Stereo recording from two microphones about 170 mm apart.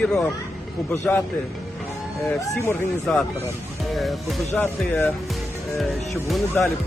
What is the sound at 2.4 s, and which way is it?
Speech, 15° left (ahead or behind).